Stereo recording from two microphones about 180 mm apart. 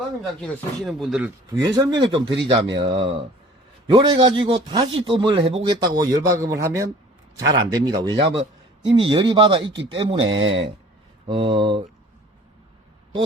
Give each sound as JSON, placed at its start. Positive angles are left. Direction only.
{"t": 0.4, "sound": "speech", "side_deg": 5}
{"t": 1.5, "sound": "speech", "side_deg": -20}